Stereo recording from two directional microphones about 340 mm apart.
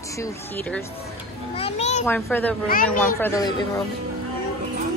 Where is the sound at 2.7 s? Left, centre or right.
Left.